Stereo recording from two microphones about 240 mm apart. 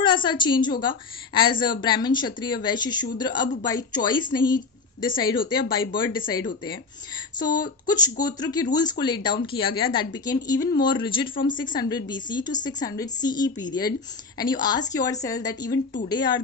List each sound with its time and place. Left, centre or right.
0.0 s a woman's voice: centre